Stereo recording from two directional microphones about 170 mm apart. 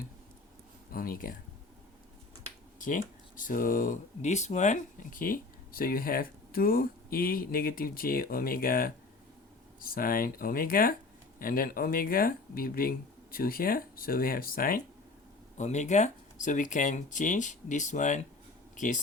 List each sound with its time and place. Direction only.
0.9 s speech: 55° left (ahead or behind)
2.7 s speech: 50° left (ahead or behind)
15.5 s speech: 45° left (ahead or behind)